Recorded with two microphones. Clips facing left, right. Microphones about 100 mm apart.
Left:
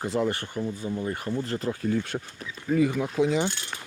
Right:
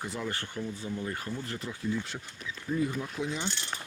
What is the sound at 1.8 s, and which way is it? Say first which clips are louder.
Speech: left 6 dB; 60° left (ahead or behind).